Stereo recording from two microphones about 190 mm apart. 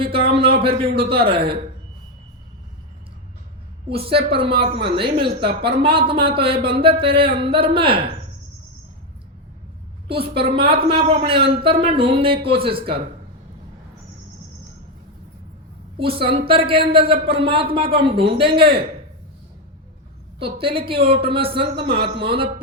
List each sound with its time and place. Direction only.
0.3 s a man's voice: 30° right (ahead or behind)
3.8 s a man's voice: 30° right (ahead or behind)
10.1 s a man's voice: 30° right (ahead or behind)
16.0 s a man's voice: 30° right (ahead or behind)
20.4 s a man's voice: 30° right (ahead or behind)